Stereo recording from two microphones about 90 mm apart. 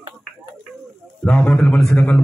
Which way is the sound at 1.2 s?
10° left (ahead or behind).